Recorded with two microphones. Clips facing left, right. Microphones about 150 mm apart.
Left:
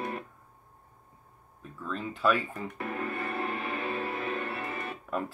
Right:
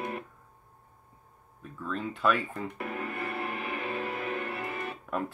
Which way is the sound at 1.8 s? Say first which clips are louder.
Even; centre (ahead or behind).